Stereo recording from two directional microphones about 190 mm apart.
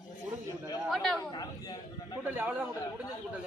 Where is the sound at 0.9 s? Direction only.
5° left (ahead or behind).